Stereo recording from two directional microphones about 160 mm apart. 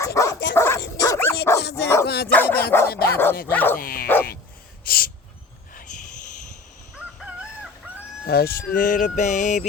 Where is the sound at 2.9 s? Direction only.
75° left (ahead or behind).